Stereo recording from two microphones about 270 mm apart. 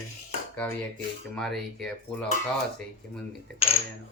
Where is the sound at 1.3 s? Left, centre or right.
Centre.